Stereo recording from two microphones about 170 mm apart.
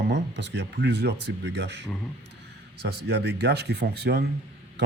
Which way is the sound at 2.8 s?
75° right (ahead or behind).